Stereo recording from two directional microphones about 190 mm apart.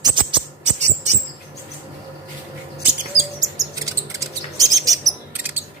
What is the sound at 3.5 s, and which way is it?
Bird, 15° right (ahead or behind).